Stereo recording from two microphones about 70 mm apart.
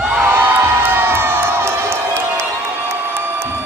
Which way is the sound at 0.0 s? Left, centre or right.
Centre.